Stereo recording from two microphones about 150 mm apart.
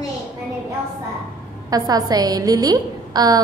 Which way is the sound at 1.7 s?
25° right (ahead or behind).